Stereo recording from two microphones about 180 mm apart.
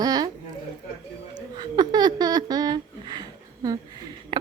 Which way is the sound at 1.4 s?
25° right (ahead or behind).